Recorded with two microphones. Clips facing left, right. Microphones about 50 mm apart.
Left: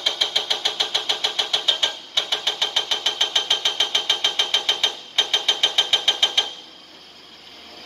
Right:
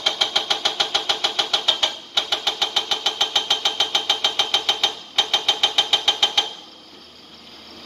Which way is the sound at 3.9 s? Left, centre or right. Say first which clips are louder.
Right 1 dB; left.